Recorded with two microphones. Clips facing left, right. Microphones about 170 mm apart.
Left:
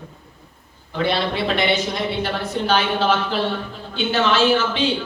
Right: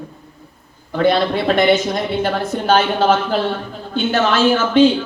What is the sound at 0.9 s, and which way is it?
A woman's voice, 50° right (ahead or behind).